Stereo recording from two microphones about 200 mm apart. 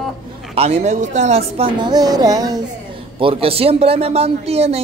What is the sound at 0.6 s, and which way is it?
A man's voice, 35° right (ahead or behind).